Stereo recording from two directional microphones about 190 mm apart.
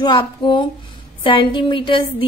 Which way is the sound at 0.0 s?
25° left (ahead or behind).